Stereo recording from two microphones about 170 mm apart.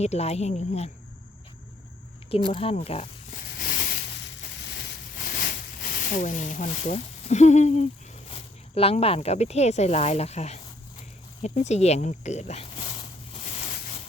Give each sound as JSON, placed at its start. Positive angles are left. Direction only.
{"t": 0.0, "sound": "speech", "side_deg": 40}
{"t": 2.5, "sound": "speech", "side_deg": 35}
{"t": 3.3, "sound": "a sound", "side_deg": 55}
{"t": 5.3, "sound": "speech", "side_deg": 55}